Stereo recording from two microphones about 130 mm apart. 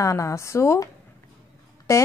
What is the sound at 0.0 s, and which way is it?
Speech, 25° left (ahead or behind).